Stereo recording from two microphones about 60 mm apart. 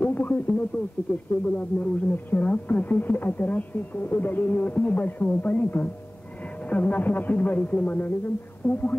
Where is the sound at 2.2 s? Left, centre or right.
Left.